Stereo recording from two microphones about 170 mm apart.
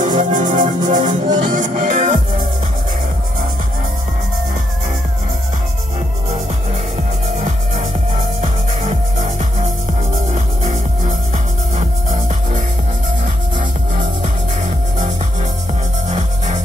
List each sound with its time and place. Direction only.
0.0 s music: 50° right (ahead or behind)
7.3 s music: 50° right (ahead or behind)
14.2 s music: 45° right (ahead or behind)